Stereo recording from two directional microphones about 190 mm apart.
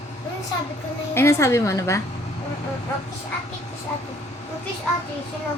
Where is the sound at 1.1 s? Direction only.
15° left (ahead or behind).